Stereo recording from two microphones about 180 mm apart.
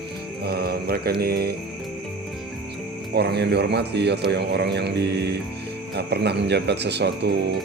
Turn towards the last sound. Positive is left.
turn(degrees=-70)  # may be behind; listen again after turning